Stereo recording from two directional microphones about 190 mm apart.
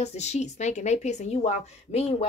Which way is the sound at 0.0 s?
35° left (ahead or behind).